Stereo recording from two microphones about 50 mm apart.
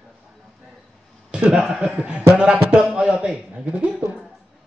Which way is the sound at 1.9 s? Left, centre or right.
Right.